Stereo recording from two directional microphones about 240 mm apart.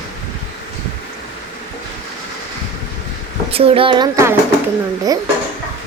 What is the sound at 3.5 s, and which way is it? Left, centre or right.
Speech, right.